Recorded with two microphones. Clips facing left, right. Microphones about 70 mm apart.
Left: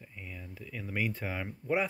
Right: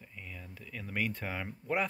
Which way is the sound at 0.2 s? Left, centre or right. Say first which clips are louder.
Left 2 dB; centre.